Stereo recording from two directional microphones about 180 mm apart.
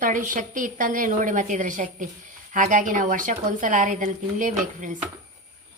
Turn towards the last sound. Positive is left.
turn(degrees=-45)  # may be behind; listen again after turning